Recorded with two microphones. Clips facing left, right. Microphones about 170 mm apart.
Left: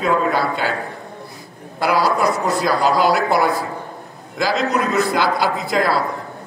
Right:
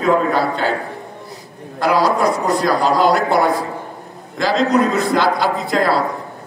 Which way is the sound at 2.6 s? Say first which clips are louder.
Right 1 dB; 5° left (ahead or behind).